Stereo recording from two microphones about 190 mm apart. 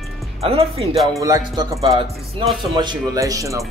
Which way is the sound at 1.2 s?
15° right (ahead or behind).